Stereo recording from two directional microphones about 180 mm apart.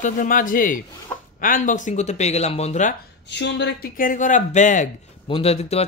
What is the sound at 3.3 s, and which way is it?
Speech, 75° left (ahead or behind).